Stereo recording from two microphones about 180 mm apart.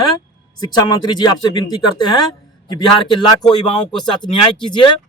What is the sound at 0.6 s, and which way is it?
Speech, 25° left (ahead or behind).